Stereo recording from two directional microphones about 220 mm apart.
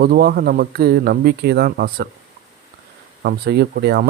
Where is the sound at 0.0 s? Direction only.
45° right (ahead or behind).